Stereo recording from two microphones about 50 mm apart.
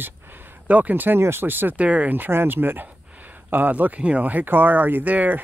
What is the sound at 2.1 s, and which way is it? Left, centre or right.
Speech, right.